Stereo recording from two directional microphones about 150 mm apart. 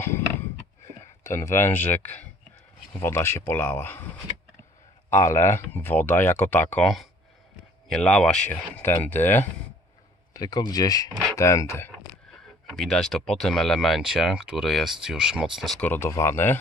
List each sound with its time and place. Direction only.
1.2 s speech: 15° left (ahead or behind)
5.1 s speech: 20° left (ahead or behind)
10.3 s speech: 25° left (ahead or behind)
12.6 s speech: centre (ahead or behind)
15.9 s speech: 15° left (ahead or behind)